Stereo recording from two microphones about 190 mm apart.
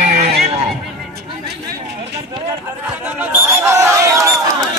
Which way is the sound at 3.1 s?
15° right (ahead or behind).